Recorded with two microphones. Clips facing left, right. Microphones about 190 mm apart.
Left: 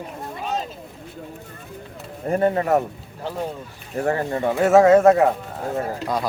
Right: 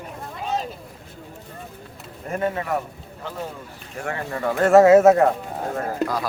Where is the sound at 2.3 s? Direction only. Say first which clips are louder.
Left 6 dB; 35° left (ahead or behind).